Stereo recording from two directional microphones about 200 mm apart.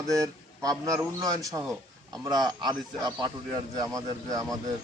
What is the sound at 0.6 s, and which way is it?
A man's voice, 15° right (ahead or behind).